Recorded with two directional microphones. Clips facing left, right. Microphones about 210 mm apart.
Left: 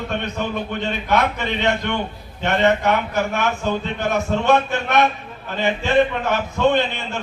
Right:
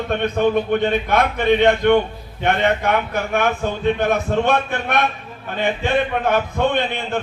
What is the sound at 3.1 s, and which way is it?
A man's voice, 55° right (ahead or behind).